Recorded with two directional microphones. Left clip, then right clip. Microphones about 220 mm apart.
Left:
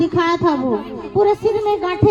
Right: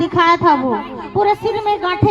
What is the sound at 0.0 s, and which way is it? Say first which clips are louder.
A child's voice: right 4 dB; 20° right (ahead or behind).